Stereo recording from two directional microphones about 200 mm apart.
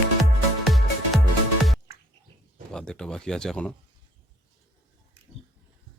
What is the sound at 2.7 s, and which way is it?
Speech, 5° left (ahead or behind).